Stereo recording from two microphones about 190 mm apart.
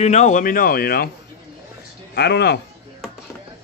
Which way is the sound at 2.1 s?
60° left (ahead or behind).